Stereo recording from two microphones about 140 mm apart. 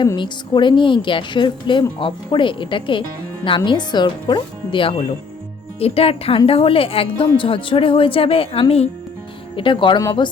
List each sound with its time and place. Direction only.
0.2 s a woman's voice: 35° left (ahead or behind)